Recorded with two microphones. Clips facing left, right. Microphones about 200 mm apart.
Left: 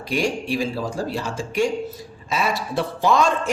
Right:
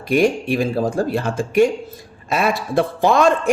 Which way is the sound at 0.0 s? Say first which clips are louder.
Right 7 dB; 55° right (ahead or behind).